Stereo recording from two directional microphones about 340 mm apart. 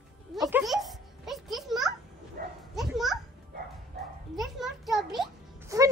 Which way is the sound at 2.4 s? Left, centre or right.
Right.